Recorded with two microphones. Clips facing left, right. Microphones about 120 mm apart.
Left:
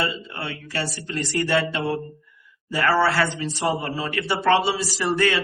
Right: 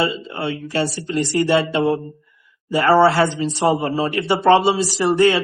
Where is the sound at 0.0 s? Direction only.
20° right (ahead or behind).